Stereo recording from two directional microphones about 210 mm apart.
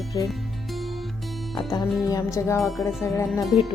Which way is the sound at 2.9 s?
Centre (ahead or behind).